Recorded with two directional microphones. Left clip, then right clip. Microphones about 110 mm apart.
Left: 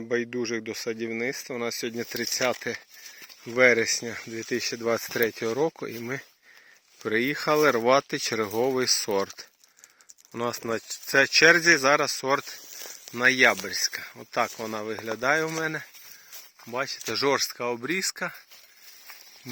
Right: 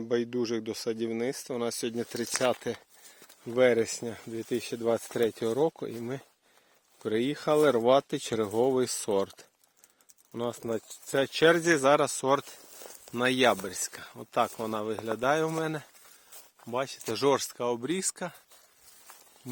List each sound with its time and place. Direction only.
0.0 s speech: 5° right (ahead or behind)
10.3 s speech: 15° left (ahead or behind)
11.1 s speech: 5° left (ahead or behind)
11.8 s speech: 25° right (ahead or behind)